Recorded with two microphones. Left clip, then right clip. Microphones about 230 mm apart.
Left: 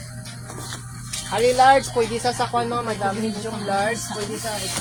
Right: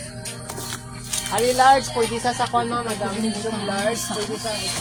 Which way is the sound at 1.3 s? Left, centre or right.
Centre.